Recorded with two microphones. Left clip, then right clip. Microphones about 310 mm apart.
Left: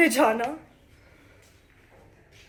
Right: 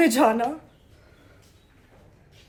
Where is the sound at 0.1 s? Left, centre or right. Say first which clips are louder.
Right 2 dB; centre.